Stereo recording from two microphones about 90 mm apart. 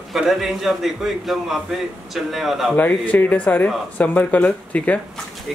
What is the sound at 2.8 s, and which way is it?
Speech, 20° left (ahead or behind).